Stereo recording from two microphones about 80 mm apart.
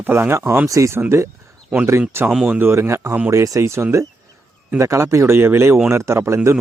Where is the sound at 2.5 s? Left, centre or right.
Right.